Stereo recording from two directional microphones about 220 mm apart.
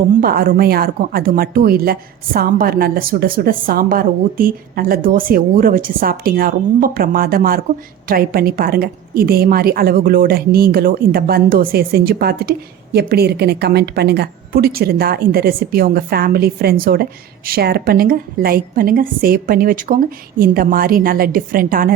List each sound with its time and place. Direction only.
0.2 s a woman's voice: 40° right (ahead or behind)